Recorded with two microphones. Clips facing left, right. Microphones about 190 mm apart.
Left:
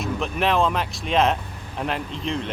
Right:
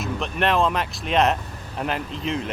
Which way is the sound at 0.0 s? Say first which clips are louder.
Even; centre (ahead or behind).